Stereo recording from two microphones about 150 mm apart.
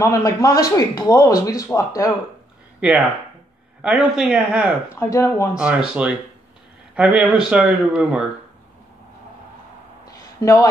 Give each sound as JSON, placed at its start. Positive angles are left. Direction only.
{"t": 0.0, "sound": "speech", "side_deg": 20}
{"t": 2.8, "sound": "speech", "side_deg": -5}
{"t": 4.9, "sound": "speech", "side_deg": 20}
{"t": 5.5, "sound": "speech", "side_deg": -5}
{"t": 10.0, "sound": "a sound", "side_deg": 20}